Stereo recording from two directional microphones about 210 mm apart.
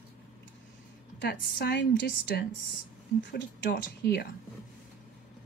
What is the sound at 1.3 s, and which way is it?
A woman's voice, 50° left (ahead or behind).